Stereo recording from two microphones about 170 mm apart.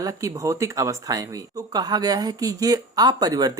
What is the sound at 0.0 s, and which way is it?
Speech, 20° right (ahead or behind).